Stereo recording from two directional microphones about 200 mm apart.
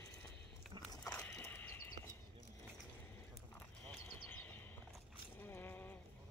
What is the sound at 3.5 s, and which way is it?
Horse, 10° left (ahead or behind).